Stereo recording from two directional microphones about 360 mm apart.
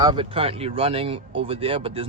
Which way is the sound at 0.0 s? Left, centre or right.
Centre.